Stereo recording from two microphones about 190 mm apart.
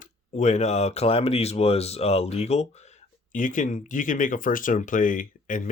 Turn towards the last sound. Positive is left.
turn(degrees=45)  # may be behind; listen again after turning